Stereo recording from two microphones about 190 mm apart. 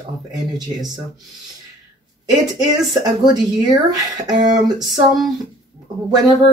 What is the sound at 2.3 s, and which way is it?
Speech, 20° right (ahead or behind).